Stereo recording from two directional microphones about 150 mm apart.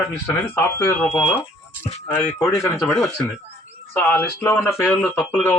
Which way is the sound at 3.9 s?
15° left (ahead or behind).